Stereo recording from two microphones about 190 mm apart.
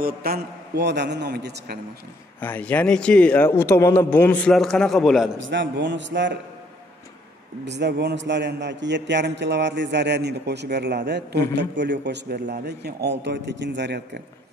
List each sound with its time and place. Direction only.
0.0 s a man's voice: 55° right (ahead or behind)
2.4 s a man's voice: 10° left (ahead or behind)
5.4 s a man's voice: 70° right (ahead or behind)
7.6 s a man's voice: 65° right (ahead or behind)